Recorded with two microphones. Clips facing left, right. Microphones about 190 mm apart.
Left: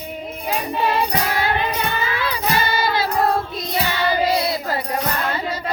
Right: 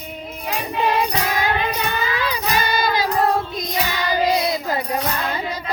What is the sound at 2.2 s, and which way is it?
Child singing, 15° right (ahead or behind).